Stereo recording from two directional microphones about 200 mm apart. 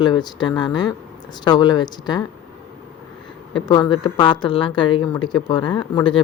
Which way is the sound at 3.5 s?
20° left (ahead or behind).